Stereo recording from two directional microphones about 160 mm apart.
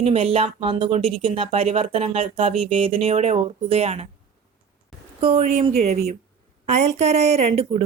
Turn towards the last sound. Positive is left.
turn(degrees=-40)  # may be behind; listen again after turning